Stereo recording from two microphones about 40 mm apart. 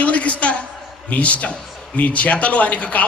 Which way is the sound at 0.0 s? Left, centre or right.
Left.